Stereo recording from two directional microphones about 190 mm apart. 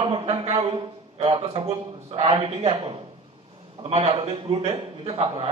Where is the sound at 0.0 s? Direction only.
25° right (ahead or behind).